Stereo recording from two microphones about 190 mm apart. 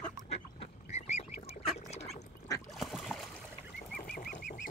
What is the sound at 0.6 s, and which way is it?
Duck, 35° left (ahead or behind).